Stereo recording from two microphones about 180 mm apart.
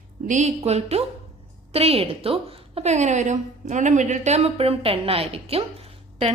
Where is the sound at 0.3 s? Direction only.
40° right (ahead or behind).